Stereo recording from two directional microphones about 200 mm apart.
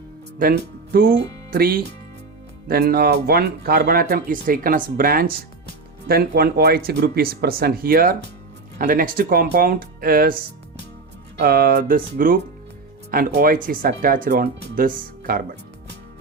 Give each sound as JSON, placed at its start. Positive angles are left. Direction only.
{"t": 0.3, "sound": "speech", "side_deg": -45}